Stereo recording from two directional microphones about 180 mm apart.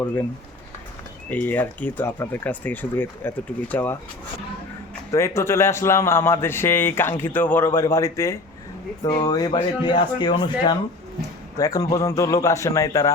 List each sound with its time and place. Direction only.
1.3 s a man's voice: 10° left (ahead or behind)
5.1 s a man's voice: 15° left (ahead or behind)